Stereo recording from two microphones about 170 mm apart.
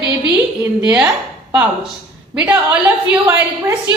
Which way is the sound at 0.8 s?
5° right (ahead or behind).